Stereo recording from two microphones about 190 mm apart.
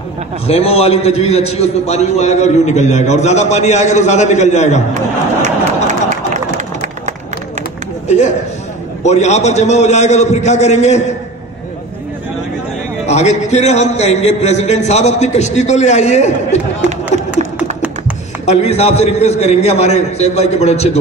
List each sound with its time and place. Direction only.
0.5 s a man's voice: 30° left (ahead or behind)
5.9 s a sound: 40° right (ahead or behind)
9.0 s a man's voice: 35° left (ahead or behind)
13.0 s a man's voice: 35° left (ahead or behind)
18.4 s a man's voice: 35° left (ahead or behind)